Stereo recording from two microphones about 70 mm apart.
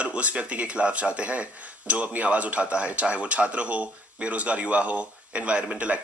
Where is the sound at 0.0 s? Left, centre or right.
Centre.